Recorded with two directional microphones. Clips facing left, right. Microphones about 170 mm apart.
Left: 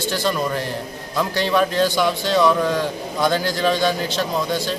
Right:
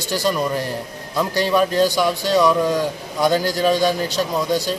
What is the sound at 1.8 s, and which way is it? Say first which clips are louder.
A man's voice: right 1 dB; 10° right (ahead or behind).